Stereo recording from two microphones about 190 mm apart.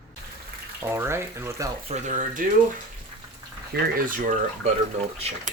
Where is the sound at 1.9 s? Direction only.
40° right (ahead or behind).